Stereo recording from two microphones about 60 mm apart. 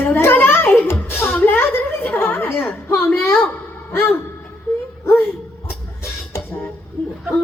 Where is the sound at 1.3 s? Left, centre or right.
Left.